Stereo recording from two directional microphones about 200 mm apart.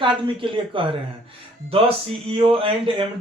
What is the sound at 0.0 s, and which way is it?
Speech, 25° right (ahead or behind).